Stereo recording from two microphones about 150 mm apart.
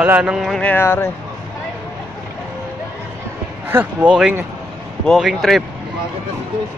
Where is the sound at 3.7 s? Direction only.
10° right (ahead or behind).